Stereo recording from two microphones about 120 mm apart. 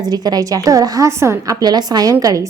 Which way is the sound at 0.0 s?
35° right (ahead or behind).